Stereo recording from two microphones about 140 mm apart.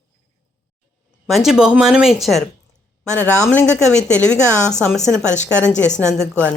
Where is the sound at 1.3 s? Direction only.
Centre (ahead or behind).